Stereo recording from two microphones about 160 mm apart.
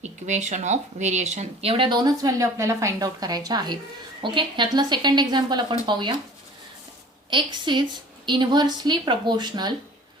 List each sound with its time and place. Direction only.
0.0 s speech: 45° right (ahead or behind); by 6.1 s 30° right (ahead or behind)
7.3 s speech: 30° right (ahead or behind)